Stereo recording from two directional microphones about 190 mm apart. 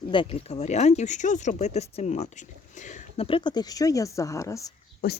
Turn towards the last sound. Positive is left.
turn(degrees=55)  # may be behind; listen again after turning